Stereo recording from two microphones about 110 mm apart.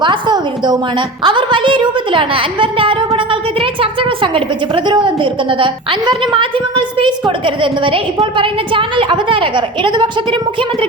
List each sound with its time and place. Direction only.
0.0 s a woman's voice: 40° right (ahead or behind)